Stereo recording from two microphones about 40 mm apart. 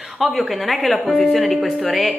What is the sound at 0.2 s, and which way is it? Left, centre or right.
Speech, centre.